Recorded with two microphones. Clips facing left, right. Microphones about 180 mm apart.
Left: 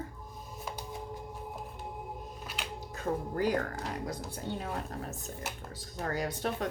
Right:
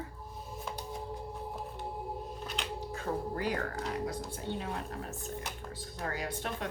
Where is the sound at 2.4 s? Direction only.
5° left (ahead or behind).